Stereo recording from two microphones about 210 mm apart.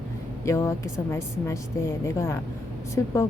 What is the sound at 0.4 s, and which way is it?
A woman's voice, 10° left (ahead or behind).